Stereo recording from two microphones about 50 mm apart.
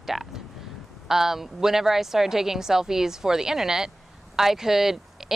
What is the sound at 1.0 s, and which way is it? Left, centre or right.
Speech, centre.